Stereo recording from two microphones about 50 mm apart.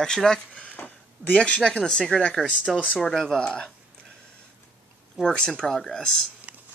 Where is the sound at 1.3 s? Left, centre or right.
Left.